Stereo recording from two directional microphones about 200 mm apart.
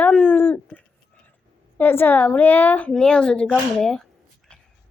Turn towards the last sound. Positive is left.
turn(degrees=5)  # may be behind; listen again after turning